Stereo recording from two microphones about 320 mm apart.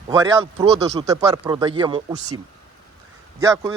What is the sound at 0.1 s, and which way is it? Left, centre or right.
Speech, centre.